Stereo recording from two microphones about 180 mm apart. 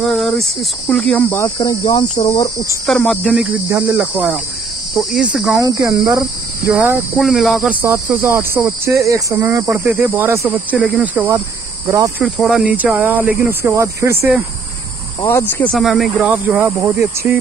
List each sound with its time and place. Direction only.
0.0 s speech: centre (ahead or behind); by 2.8 s 20° left (ahead or behind)
2.9 s speech: 5° left (ahead or behind)
3.6 s speech: 10° right (ahead or behind)
5.6 s cricket: 20° right (ahead or behind)
6.0 s speech: 20° right (ahead or behind)
6.7 s speech: 10° right (ahead or behind)
15.2 s speech: 10° left (ahead or behind); by 17.4 s 15° right (ahead or behind)